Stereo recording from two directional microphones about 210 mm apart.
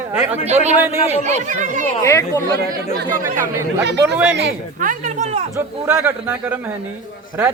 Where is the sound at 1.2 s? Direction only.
35° right (ahead or behind).